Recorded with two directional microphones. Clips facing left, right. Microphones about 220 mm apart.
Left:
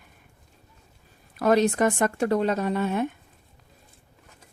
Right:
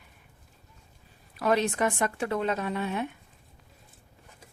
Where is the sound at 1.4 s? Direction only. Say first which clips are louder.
Left 5 dB; 40° left (ahead or behind).